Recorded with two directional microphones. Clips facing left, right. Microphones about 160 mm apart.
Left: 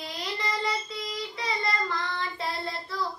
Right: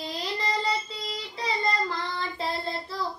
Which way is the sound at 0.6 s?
30° right (ahead or behind).